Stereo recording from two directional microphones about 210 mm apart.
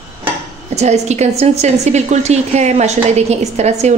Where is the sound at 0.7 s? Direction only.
30° right (ahead or behind).